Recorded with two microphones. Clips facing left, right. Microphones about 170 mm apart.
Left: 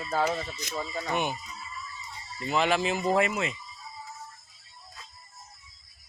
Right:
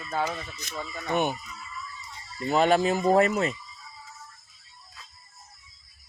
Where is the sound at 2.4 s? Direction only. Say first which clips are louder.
Right 4 dB; 45° right (ahead or behind).